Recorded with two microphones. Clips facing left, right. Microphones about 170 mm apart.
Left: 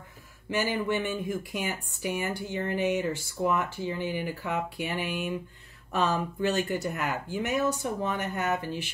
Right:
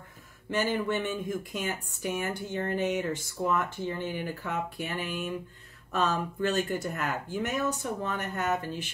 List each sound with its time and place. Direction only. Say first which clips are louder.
0.5 s speech: even; 10° left (ahead or behind)